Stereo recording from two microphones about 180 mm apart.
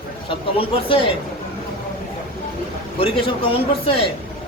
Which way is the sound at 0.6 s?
30° left (ahead or behind).